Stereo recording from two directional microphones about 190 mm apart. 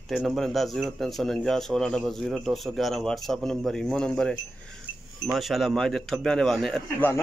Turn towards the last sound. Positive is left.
turn(degrees=0)  # may be behind; listen again after turning